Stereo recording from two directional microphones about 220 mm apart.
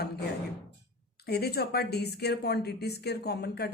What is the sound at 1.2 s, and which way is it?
A woman's voice, 45° left (ahead or behind).